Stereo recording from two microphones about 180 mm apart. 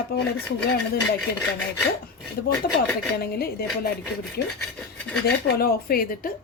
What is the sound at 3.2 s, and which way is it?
Speech, 60° left (ahead or behind).